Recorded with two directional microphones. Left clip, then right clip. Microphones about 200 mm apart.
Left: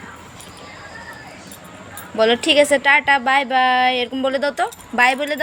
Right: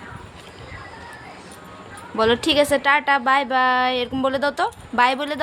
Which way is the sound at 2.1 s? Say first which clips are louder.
Left 3 dB; 15° right (ahead or behind).